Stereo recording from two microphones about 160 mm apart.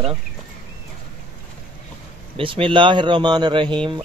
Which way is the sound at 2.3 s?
30° right (ahead or behind).